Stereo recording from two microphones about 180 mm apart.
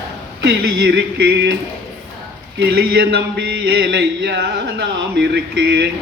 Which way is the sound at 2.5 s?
60° right (ahead or behind).